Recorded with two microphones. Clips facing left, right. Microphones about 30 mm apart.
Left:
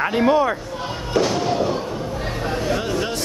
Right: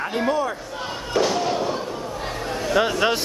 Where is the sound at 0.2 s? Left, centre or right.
Left.